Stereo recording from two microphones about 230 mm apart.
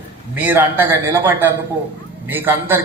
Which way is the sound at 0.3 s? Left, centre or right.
Centre.